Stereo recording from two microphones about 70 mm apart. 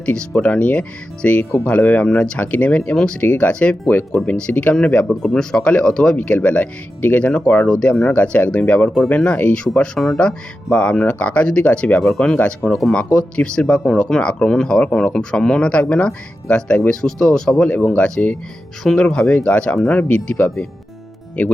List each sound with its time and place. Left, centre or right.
0.0 s speech: centre
12.0 s speech: centre
12.4 s speech: centre
12.7 s speech: centre
13.0 s speech: centre